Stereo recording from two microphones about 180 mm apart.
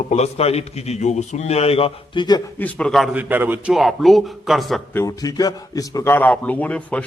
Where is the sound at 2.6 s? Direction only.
5° left (ahead or behind).